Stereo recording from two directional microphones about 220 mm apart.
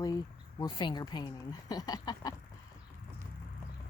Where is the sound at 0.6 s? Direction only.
20° left (ahead or behind).